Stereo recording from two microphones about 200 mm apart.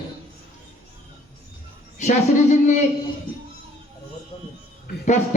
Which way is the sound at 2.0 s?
35° left (ahead or behind).